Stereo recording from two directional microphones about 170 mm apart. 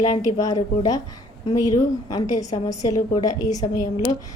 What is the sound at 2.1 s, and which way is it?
A woman's voice, 20° left (ahead or behind).